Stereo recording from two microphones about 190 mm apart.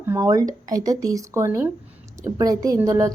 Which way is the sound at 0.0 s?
15° right (ahead or behind).